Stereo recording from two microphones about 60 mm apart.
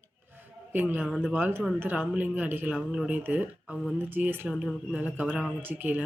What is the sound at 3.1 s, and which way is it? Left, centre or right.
Speech, right.